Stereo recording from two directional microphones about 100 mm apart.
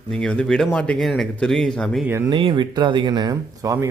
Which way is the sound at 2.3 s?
55° right (ahead or behind).